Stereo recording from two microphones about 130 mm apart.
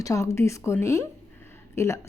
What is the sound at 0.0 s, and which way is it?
A woman's voice, 25° left (ahead or behind).